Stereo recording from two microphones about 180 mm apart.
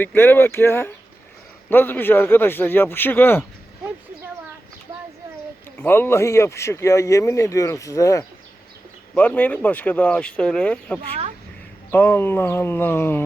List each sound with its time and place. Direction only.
0.0 s speech: 10° left (ahead or behind)
5.7 s speech: 10° left (ahead or behind)